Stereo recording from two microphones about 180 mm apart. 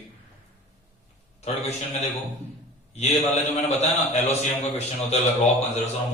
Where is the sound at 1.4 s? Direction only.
35° left (ahead or behind).